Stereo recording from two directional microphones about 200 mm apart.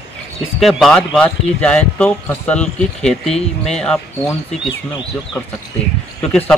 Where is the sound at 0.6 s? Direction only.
Centre (ahead or behind).